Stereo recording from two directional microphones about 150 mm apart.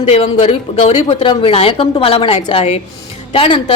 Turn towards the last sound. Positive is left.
turn(degrees=35)  # may be behind; listen again after turning